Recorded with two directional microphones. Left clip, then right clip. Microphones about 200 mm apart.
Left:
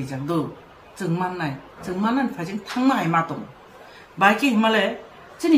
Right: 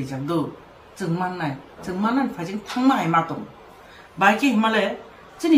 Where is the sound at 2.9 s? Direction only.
Centre (ahead or behind).